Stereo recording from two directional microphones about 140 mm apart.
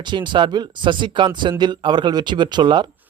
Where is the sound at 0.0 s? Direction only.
35° right (ahead or behind).